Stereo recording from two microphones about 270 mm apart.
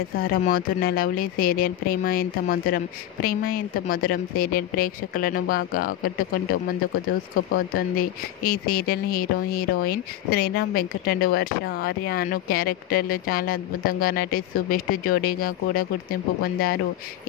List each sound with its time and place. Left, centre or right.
0.2 s speech: left
7.5 s speech: left